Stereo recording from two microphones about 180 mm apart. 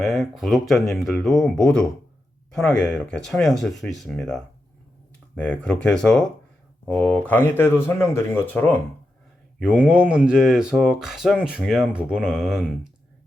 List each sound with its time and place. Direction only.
0.0 s speech: centre (ahead or behind)
9.6 s speech: 5° right (ahead or behind)